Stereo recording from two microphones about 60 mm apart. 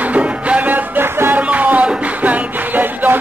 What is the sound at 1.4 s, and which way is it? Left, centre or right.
Music, right.